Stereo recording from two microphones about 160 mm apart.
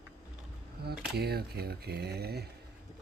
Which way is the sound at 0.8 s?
85° right.